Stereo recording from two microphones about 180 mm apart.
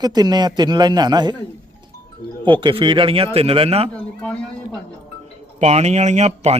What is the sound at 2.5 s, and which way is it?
Speech, 25° right (ahead or behind).